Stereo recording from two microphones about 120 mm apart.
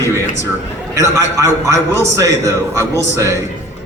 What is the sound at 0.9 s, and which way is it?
A man's voice, 25° right (ahead or behind).